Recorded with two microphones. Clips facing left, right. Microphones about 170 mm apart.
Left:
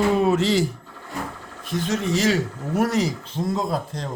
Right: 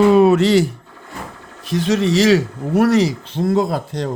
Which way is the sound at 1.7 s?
85° right.